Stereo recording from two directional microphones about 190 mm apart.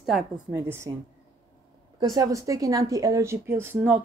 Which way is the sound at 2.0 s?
20° right (ahead or behind).